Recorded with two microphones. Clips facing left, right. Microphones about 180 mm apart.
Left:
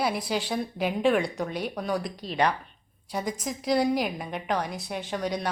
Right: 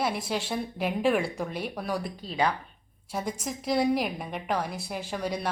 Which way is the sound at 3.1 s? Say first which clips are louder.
Left 1 dB; centre (ahead or behind).